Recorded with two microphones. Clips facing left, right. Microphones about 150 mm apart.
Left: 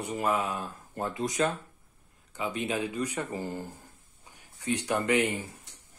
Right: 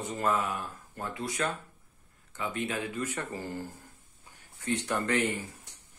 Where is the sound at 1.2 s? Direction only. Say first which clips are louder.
Left 4 dB; 40° left (ahead or behind).